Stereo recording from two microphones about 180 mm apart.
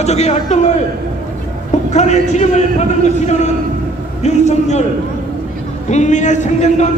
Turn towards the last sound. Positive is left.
turn(degrees=40)  # may be behind; listen again after turning